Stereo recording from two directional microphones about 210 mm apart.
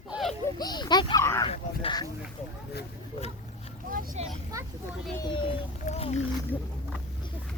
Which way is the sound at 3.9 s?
40° right (ahead or behind).